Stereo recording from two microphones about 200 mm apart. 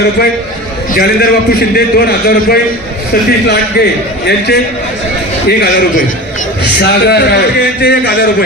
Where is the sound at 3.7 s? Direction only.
55° left (ahead or behind).